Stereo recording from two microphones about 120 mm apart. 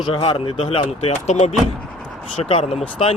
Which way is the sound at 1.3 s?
70° left (ahead or behind).